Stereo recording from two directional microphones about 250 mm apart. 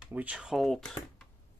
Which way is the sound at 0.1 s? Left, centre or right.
Centre.